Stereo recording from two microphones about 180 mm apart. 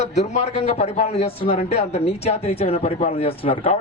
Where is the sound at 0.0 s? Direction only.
35° left (ahead or behind).